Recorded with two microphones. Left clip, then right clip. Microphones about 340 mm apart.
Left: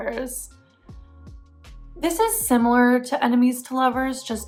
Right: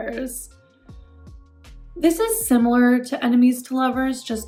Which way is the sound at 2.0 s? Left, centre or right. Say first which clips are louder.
Right 2 dB; centre.